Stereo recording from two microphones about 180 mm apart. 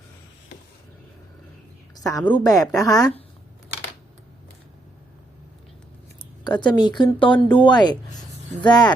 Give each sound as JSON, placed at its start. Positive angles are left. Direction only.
{"t": 2.0, "sound": "a woman's voice", "side_deg": 20}
{"t": 6.4, "sound": "speech", "side_deg": 25}